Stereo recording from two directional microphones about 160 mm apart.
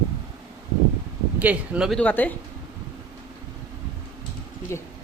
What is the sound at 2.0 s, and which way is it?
Speech, 10° left (ahead or behind).